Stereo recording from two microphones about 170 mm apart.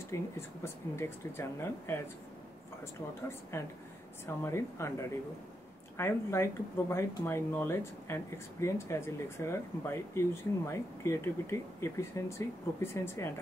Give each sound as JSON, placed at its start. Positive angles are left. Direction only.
{"t": 0.1, "sound": "speech", "side_deg": 15}